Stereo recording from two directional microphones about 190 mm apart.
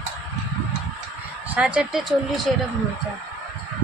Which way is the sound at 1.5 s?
5° right (ahead or behind).